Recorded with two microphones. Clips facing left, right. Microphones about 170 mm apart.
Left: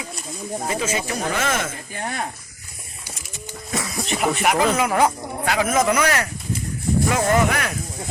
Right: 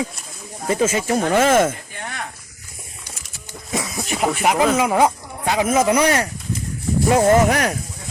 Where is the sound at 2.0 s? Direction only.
35° left (ahead or behind).